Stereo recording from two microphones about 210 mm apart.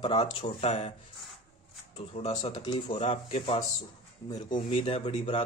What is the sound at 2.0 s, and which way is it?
Speech, 30° left (ahead or behind).